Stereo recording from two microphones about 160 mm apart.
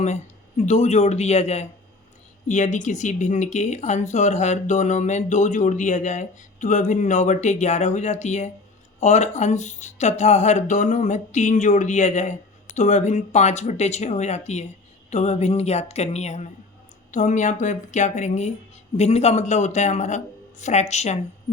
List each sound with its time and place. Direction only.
0.0 s speech: 45° left (ahead or behind)